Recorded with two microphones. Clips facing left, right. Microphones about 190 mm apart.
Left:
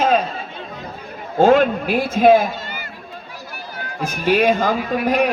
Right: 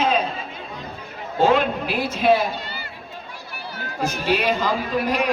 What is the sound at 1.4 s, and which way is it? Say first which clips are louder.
A man's voice: left 5 dB; 50° left (ahead or behind).